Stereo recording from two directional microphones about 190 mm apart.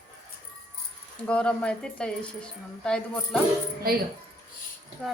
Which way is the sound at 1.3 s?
5° left (ahead or behind).